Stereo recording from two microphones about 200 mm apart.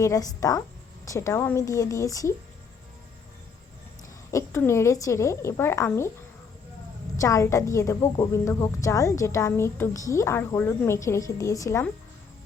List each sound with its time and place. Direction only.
0.0 s a woman's voice: 15° left (ahead or behind)
4.3 s a woman's voice: 15° left (ahead or behind)
7.2 s a woman's voice: 15° left (ahead or behind)